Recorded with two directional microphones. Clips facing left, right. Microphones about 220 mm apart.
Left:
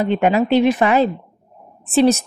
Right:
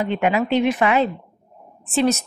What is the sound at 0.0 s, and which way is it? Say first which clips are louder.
A woman's voice: left 4 dB; 40° left (ahead or behind).